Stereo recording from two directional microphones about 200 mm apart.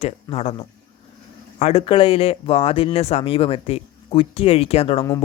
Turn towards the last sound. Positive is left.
turn(degrees=30)  # may be behind; listen again after turning